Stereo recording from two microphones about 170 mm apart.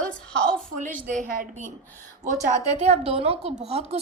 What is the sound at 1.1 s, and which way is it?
Speech, 50° right (ahead or behind).